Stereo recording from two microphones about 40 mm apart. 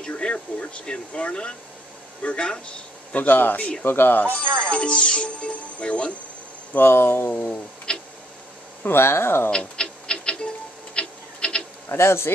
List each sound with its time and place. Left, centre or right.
0.1 s speech: left
3.2 s speech: left
3.8 s speech: left
4.6 s speech: left
6.8 s speech: left
7.9 s tick-tock: left
8.8 s speech: left
9.5 s a sound: left
11.9 s speech: left